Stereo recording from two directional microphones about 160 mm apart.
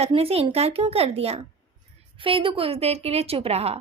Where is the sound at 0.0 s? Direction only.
40° right (ahead or behind).